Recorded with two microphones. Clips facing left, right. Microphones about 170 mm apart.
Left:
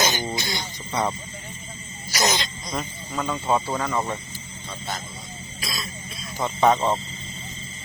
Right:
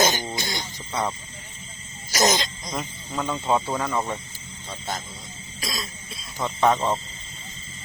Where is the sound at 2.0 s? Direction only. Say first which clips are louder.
Right 3 dB; 45° right (ahead or behind).